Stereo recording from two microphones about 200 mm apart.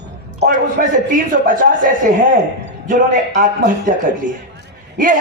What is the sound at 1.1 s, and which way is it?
Speech, 45° right (ahead or behind).